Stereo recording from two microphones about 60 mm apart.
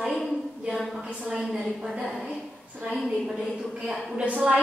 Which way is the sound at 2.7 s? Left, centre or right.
Right.